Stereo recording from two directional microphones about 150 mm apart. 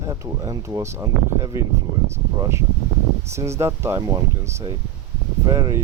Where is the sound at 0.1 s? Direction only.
25° right (ahead or behind).